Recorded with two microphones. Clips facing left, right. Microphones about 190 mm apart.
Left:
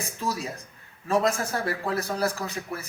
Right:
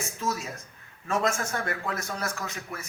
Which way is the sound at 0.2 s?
35° left (ahead or behind).